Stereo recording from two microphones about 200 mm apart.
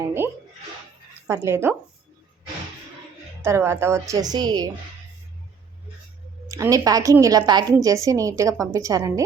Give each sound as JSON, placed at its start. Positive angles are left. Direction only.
{"t": 0.0, "sound": "speech", "side_deg": -10}
{"t": 1.3, "sound": "a woman's voice", "side_deg": -15}
{"t": 3.4, "sound": "a woman's voice", "side_deg": -15}
{"t": 6.5, "sound": "a woman's voice", "side_deg": -15}